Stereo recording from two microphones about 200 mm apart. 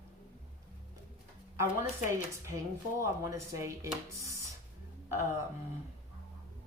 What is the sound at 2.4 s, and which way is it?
A woman's voice, 15° right (ahead or behind).